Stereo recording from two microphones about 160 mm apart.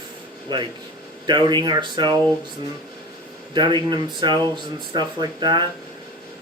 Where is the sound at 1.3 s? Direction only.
25° right (ahead or behind).